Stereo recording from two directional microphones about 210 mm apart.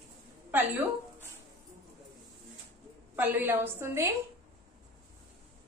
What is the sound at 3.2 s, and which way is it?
Speech, 10° right (ahead or behind).